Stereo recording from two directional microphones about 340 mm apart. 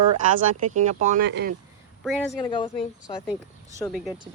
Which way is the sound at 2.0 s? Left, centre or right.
Centre.